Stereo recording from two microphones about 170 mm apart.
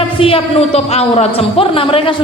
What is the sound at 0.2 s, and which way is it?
A man's voice, 35° left (ahead or behind).